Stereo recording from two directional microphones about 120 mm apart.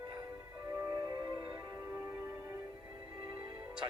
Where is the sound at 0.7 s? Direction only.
25° right (ahead or behind).